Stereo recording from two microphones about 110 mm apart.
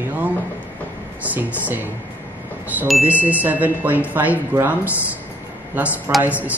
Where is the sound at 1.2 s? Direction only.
15° right (ahead or behind).